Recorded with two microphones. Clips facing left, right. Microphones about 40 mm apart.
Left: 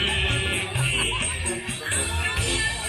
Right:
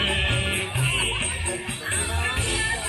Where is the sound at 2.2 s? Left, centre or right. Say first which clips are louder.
Even; centre.